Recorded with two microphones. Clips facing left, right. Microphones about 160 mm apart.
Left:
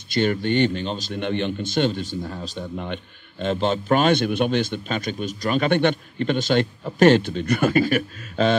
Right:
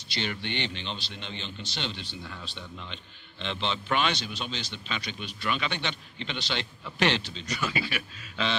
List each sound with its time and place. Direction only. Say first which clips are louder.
0.1 s speech: left 13 dB; 45° left (ahead or behind)